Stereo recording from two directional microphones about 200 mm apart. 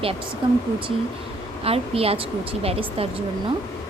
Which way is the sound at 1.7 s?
30° right (ahead or behind).